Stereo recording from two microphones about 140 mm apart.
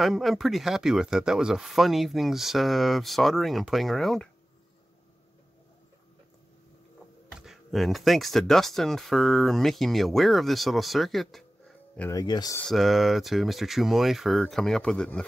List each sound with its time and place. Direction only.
0.0 s speech: centre (ahead or behind)
7.3 s speech: centre (ahead or behind)
12.1 s speech: 30° left (ahead or behind)
12.6 s speech: centre (ahead or behind)